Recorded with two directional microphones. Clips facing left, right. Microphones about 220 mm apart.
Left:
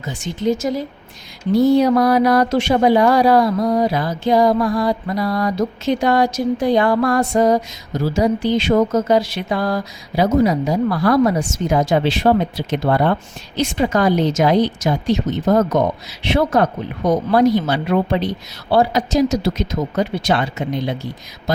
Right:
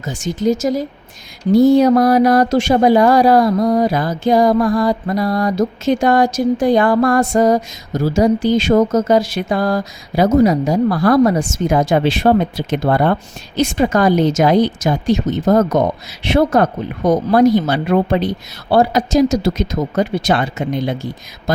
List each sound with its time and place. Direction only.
0.0 s speech: 45° right (ahead or behind)